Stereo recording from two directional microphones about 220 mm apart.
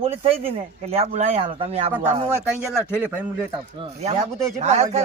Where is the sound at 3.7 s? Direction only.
25° right (ahead or behind).